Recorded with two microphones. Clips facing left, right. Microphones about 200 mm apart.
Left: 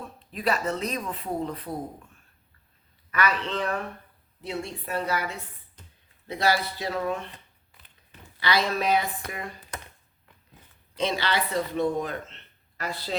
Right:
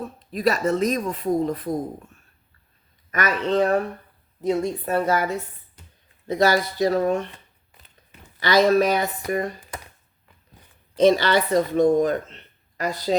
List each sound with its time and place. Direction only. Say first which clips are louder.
0.0 s speech: right 7 dB; 40° right (ahead or behind)
3.1 s speech: right 5 dB; 45° right (ahead or behind)
8.5 s speech: right 8 dB; 45° right (ahead or behind)
10.9 s speech: right 10 dB; 45° right (ahead or behind)